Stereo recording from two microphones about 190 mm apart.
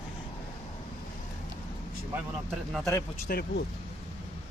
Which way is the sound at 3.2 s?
55° left (ahead or behind).